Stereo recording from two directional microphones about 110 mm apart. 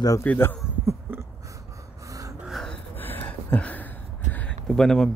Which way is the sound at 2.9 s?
20° left (ahead or behind).